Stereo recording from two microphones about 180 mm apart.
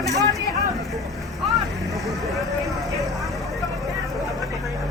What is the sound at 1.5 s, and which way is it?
Vehicle, centre (ahead or behind).